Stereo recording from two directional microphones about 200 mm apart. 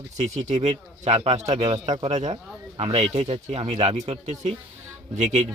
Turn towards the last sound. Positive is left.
turn(degrees=-35)  # may be behind; listen again after turning